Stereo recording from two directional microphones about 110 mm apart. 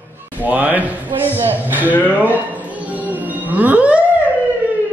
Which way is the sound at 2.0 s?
15° right (ahead or behind).